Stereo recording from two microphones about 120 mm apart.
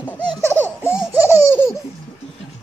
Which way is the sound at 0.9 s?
15° right (ahead or behind).